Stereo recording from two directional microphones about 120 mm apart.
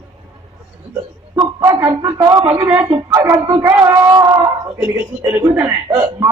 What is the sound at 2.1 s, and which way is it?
A woman's voice, 30° right (ahead or behind).